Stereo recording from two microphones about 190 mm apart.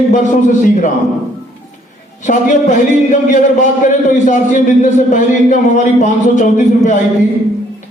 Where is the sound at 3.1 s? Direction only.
40° left (ahead or behind).